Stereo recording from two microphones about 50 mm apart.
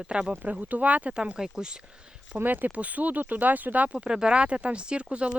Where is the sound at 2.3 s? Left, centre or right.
Right.